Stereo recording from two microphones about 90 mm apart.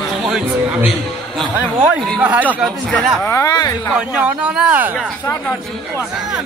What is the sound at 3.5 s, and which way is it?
Speech, 45° left (ahead or behind).